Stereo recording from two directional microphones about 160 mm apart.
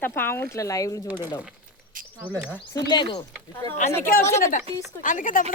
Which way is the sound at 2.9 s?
30° left (ahead or behind).